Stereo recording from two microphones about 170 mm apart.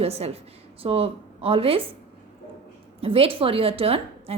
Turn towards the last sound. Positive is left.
turn(degrees=-35)  # may be behind; listen again after turning